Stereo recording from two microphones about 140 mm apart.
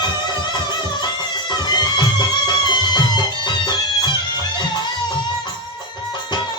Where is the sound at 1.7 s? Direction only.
30° left (ahead or behind).